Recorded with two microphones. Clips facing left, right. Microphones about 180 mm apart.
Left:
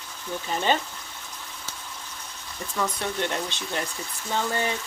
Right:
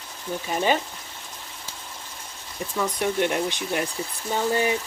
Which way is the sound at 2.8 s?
15° right (ahead or behind).